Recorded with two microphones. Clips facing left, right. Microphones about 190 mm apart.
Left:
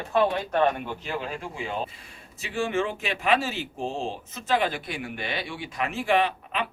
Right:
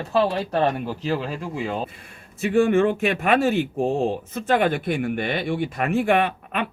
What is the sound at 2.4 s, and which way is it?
Speech, 55° right (ahead or behind).